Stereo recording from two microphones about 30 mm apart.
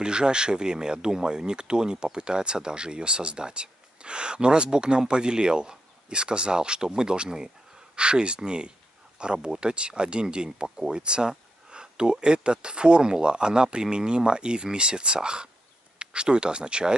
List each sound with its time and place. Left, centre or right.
0.0 s speech: right
7.9 s speech: right